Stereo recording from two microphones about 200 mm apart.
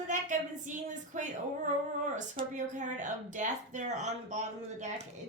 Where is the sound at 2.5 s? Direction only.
40° right (ahead or behind).